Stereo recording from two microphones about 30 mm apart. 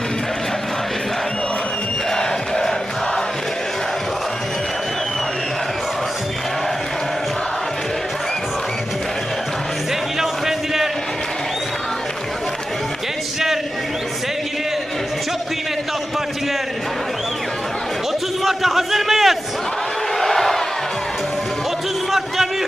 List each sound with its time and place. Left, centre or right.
2.1 s crowd: centre
10.2 s music: centre
18.4 s a sound: centre
20.1 s crowd: centre